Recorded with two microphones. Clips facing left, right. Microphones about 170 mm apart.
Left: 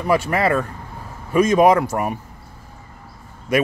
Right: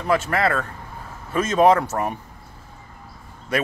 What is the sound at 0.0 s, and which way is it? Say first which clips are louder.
Speech: left 2 dB; 15° left (ahead or behind).